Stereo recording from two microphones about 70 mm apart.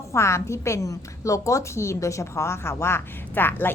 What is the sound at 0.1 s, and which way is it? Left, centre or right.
A woman's voice, left.